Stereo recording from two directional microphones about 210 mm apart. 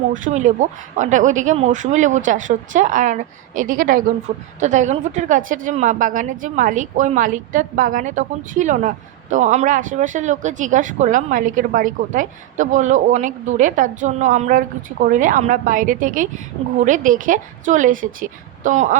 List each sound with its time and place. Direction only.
0.1 s speech: 35° right (ahead or behind)